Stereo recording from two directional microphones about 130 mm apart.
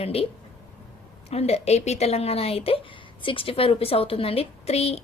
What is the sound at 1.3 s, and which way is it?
A woman's voice, 55° left (ahead or behind).